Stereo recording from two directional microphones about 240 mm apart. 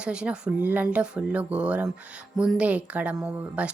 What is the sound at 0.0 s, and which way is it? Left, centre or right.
A woman's voice, centre.